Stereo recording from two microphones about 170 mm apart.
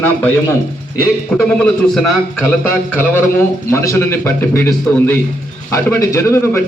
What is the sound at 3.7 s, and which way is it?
A man's voice, 15° left (ahead or behind).